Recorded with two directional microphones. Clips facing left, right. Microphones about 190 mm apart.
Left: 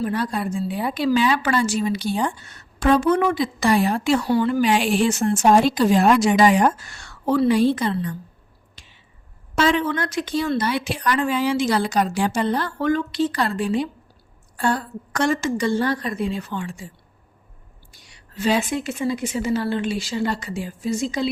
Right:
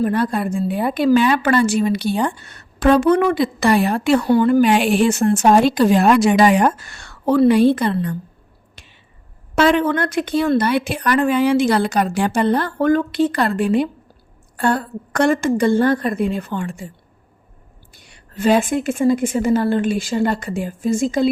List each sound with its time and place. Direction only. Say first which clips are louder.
0.0 s a woman's voice: right 5 dB; 55° right (ahead or behind)
8.7 s finger snapping: right 4 dB; 60° right (ahead or behind)
9.6 s a woman's voice: right 5 dB; 60° right (ahead or behind)
17.9 s a woman's voice: right 3 dB; 55° right (ahead or behind)